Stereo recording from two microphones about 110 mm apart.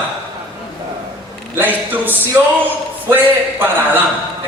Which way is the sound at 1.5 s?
15° right (ahead or behind).